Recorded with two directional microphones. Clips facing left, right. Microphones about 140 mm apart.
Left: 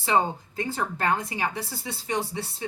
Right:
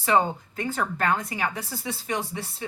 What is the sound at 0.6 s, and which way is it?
Speech, 25° left (ahead or behind).